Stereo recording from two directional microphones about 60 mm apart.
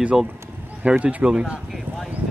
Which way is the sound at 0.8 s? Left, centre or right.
Right.